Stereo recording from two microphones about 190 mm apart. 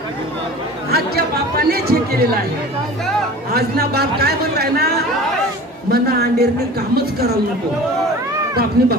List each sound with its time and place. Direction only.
0.9 s chatter: 55° right (ahead or behind)
3.5 s a man's voice: 55° right (ahead or behind)
5.9 s a sound: 55° right (ahead or behind)
6.9 s a man's voice: 55° right (ahead or behind)
8.8 s a man's voice: 55° right (ahead or behind)